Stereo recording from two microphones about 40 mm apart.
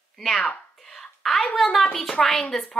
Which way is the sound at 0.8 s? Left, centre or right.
Centre.